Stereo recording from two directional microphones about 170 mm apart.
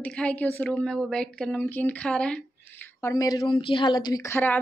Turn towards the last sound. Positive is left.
turn(degrees=15)  # may be behind; listen again after turning